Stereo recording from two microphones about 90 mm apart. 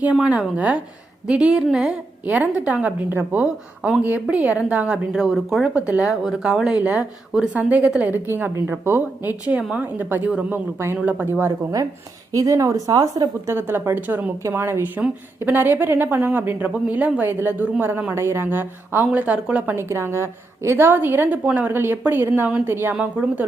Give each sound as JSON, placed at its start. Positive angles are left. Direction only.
{"t": 0.0, "sound": "a woman's voice", "side_deg": -10}
{"t": 3.4, "sound": "a woman's voice", "side_deg": -10}
{"t": 4.0, "sound": "a woman's voice", "side_deg": -20}
{"t": 5.9, "sound": "a woman's voice", "side_deg": -15}
{"t": 12.3, "sound": "a woman's voice", "side_deg": -40}
{"t": 13.6, "sound": "a woman's voice", "side_deg": -25}
{"t": 19.7, "sound": "speech", "side_deg": -30}